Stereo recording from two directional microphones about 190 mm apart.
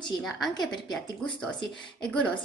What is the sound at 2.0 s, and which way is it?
Speech, 5° left (ahead or behind).